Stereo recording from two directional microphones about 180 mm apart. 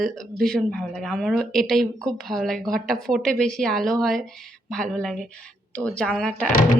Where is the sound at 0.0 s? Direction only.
Centre (ahead or behind).